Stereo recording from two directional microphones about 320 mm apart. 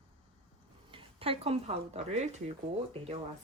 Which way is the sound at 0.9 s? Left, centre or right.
Centre.